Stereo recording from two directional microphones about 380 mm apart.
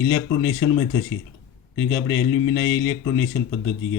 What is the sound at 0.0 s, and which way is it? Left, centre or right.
Speech, left.